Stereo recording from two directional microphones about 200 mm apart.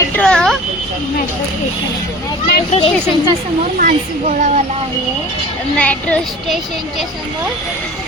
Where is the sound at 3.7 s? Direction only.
40° right (ahead or behind).